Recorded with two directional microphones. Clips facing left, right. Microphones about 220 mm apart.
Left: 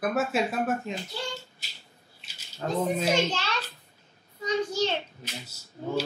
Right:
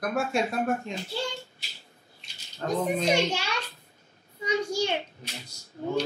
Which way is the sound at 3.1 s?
10° right (ahead or behind).